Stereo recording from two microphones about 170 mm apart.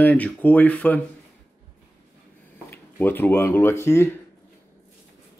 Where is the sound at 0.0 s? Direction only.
10° left (ahead or behind).